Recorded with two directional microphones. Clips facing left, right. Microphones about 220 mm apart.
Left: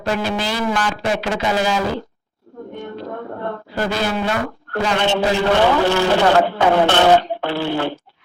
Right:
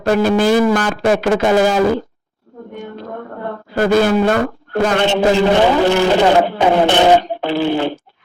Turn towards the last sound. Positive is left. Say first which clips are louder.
# right 4 dB
turn(degrees=-15)  # may be behind; listen again after turning